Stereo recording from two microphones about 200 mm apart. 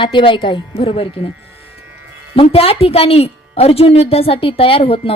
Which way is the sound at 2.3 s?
30° left (ahead or behind).